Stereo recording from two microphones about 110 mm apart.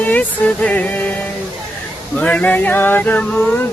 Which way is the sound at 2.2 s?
15° left (ahead or behind).